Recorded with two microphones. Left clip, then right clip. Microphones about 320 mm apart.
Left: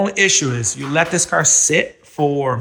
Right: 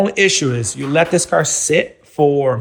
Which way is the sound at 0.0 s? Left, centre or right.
Centre.